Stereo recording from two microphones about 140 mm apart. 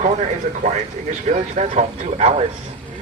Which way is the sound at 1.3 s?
60° right (ahead or behind).